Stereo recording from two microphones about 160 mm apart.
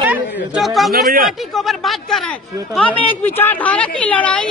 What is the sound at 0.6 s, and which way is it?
A woman's voice, centre (ahead or behind).